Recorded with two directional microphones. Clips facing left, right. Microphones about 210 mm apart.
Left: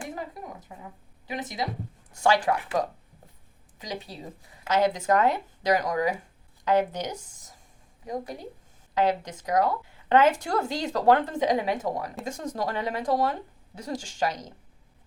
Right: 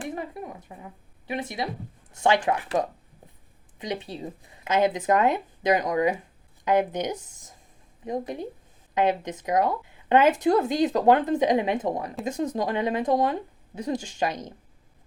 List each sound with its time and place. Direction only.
0.0 s a sound: 25° right (ahead or behind)
2.1 s speech: 20° right (ahead or behind)
3.8 s speech: 25° right (ahead or behind)